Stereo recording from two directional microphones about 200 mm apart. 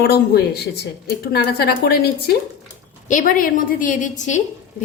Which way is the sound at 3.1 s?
45° left (ahead or behind).